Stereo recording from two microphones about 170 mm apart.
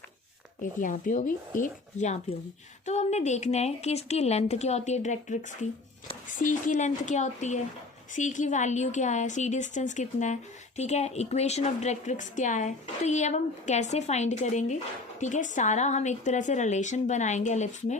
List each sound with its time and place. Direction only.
0.6 s a woman's voice: 50° left (ahead or behind)